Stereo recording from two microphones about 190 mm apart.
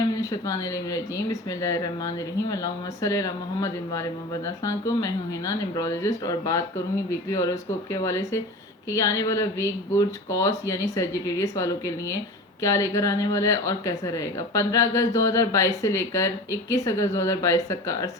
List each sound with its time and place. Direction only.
0.2 s speech: 20° left (ahead or behind)